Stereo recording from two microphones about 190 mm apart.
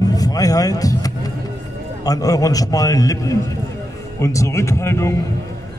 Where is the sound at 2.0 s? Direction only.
20° left (ahead or behind).